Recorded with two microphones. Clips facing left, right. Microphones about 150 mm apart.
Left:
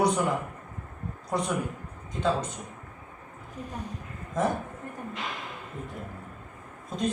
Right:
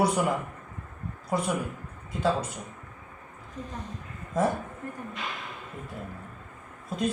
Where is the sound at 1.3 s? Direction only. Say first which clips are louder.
Right 1 dB; 5° right (ahead or behind).